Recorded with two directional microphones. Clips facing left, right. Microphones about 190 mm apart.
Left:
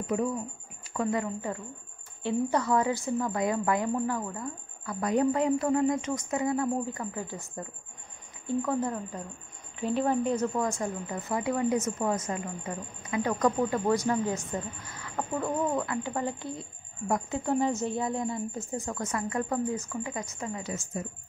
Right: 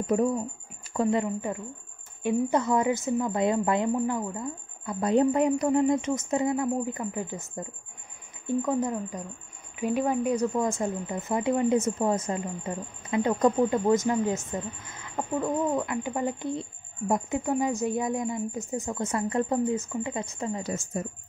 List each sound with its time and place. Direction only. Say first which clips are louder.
0.0 s speech: right 4 dB; 40° right (ahead or behind)
0.9 s speech: right 4 dB; 20° right (ahead or behind)
15.3 s speech: right 3 dB; 10° right (ahead or behind); by 20.6 s 30° right (ahead or behind)
20.6 s speech: right 4 dB; 45° right (ahead or behind)